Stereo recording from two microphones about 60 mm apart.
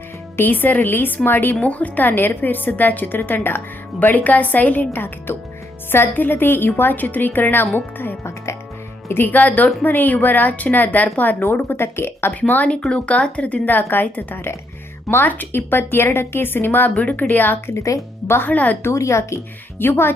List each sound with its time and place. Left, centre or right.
0.3 s a woman's voice: left
1.6 s a woman's voice: left
7.9 s music: left
9.0 s a woman's voice: left
12.3 s a woman's voice: left
17.7 s speech: left
18.3 s a woman's voice: left
18.5 s speech: left
18.8 s a woman's voice: left
19.8 s a woman's voice: left